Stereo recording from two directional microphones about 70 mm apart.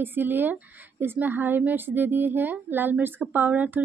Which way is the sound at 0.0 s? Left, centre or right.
Right.